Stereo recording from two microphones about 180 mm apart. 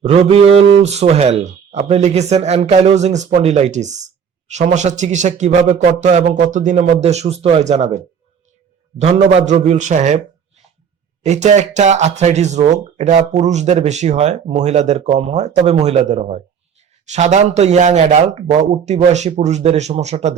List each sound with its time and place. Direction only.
0.1 s speech: 35° right (ahead or behind)
11.2 s speech: 40° right (ahead or behind)